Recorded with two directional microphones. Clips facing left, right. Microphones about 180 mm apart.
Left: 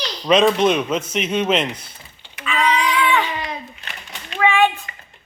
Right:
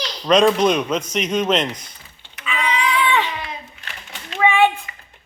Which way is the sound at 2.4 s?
10° right (ahead or behind).